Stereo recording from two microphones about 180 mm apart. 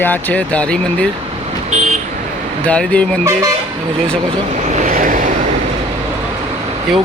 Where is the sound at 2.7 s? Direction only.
5° left (ahead or behind).